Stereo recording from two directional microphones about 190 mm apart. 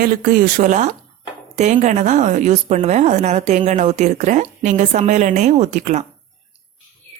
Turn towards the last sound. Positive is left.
turn(degrees=-40)  # may be behind; listen again after turning